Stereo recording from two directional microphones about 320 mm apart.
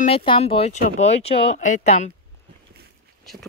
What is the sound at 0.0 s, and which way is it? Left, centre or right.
Speech, centre.